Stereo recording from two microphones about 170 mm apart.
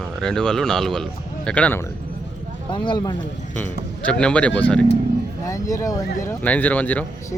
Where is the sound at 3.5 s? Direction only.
10° left (ahead or behind).